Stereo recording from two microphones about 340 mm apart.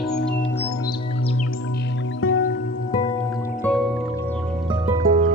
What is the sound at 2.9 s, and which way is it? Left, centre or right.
Music, centre.